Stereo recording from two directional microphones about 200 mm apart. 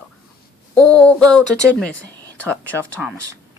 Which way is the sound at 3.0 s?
5° right (ahead or behind).